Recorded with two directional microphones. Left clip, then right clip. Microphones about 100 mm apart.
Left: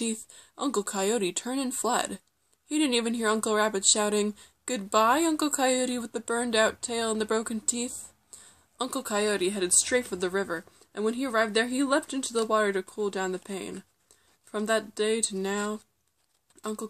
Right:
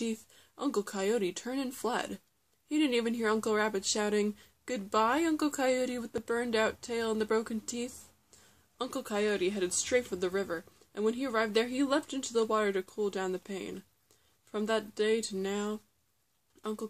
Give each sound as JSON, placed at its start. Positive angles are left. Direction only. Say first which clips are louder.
{"t": 0.0, "sound": "speech", "louder": "left 4 dB", "side_deg": 35}